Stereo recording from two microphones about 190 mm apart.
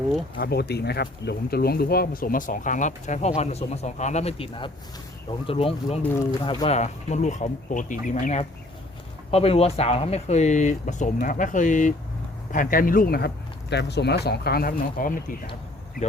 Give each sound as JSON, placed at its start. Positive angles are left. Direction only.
{"t": 0.3, "sound": "speech", "side_deg": 55}